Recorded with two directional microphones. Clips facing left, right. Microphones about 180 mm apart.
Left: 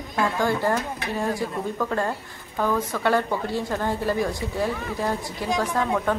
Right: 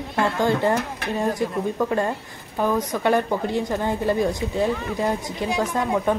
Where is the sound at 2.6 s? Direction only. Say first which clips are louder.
Right 2 dB; 20° right (ahead or behind).